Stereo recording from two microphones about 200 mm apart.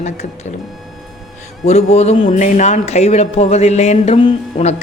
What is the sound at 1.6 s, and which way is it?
A man's voice, 30° left (ahead or behind).